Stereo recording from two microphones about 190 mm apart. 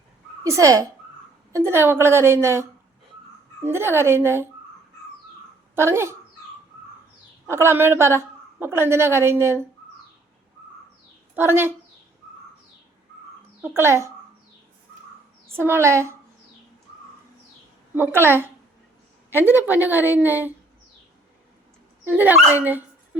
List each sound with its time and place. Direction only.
0.4 s a woman's voice: 15° right (ahead or behind)
5.7 s a woman's voice: 15° right (ahead or behind)
7.4 s a woman's voice: 15° right (ahead or behind)
11.3 s a woman's voice: 10° right (ahead or behind)
13.6 s a woman's voice: 10° right (ahead or behind)
15.4 s a woman's voice: 10° right (ahead or behind)
17.9 s a woman's voice: 10° right (ahead or behind)
22.0 s a woman's voice: 10° right (ahead or behind)